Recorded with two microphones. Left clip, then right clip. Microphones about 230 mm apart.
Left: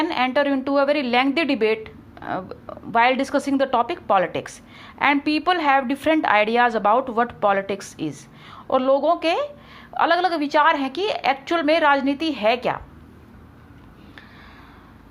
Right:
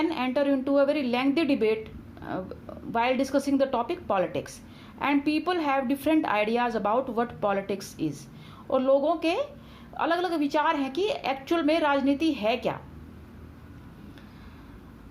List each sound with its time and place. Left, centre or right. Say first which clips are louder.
0.0 s a woman's voice: left 6 dB; centre